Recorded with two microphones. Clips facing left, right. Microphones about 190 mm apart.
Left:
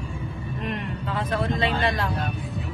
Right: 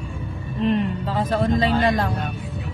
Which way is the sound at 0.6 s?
30° right (ahead or behind).